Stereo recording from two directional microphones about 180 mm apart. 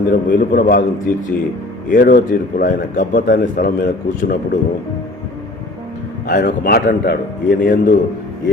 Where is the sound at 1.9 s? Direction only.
50° left (ahead or behind).